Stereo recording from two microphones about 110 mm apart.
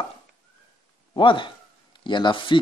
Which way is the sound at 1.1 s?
50° left (ahead or behind).